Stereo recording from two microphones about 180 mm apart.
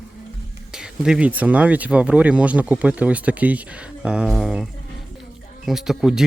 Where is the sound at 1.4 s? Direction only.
10° right (ahead or behind).